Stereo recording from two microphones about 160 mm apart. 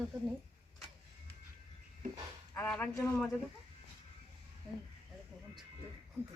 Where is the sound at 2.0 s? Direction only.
55° right (ahead or behind).